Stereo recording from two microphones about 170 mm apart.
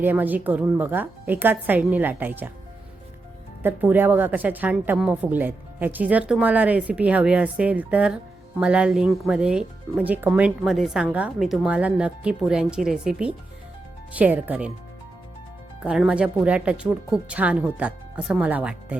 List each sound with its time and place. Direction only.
0.0 s a woman's voice: 10° right (ahead or behind)
3.6 s a woman's voice: 10° right (ahead or behind)
15.8 s a woman's voice: 5° right (ahead or behind)